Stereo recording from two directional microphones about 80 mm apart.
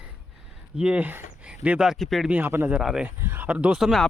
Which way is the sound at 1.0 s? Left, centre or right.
Right.